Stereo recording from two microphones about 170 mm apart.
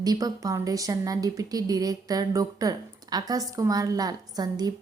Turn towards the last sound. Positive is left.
turn(degrees=-25)  # may be behind; listen again after turning